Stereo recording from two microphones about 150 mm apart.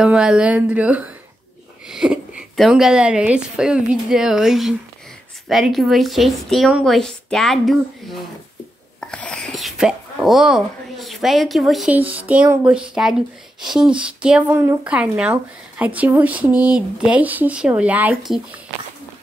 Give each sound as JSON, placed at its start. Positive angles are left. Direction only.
{"t": 0.0, "sound": "a woman's voice", "side_deg": -5}
{"t": 14.6, "sound": "a woman's voice", "side_deg": -20}
{"t": 15.0, "sound": "speech", "side_deg": -10}